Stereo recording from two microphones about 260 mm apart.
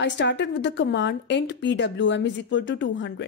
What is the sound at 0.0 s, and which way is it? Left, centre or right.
A woman's voice, left.